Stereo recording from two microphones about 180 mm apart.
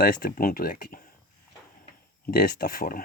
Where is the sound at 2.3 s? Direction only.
55° left (ahead or behind).